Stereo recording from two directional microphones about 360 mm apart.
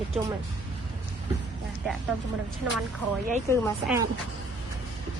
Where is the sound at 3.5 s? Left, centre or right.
Centre.